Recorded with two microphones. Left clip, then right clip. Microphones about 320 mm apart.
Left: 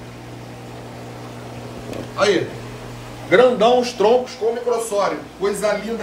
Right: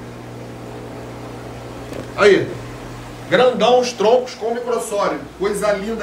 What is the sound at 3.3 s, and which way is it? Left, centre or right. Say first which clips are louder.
Speech: even; left.